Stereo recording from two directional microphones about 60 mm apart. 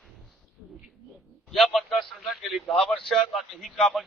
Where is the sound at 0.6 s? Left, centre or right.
Centre.